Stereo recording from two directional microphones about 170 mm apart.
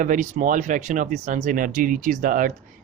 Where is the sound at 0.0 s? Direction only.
50° right (ahead or behind).